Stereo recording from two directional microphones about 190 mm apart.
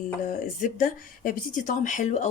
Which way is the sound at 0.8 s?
45° left (ahead or behind).